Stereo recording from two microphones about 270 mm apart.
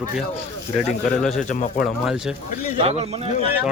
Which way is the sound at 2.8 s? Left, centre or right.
Right.